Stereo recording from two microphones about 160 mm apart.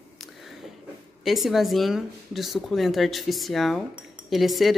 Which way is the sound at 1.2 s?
Centre (ahead or behind).